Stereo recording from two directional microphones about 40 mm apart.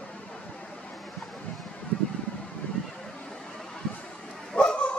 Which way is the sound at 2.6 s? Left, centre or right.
Left.